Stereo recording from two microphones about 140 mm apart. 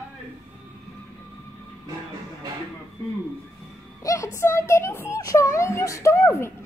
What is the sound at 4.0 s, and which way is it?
A woman's voice, 25° left (ahead or behind).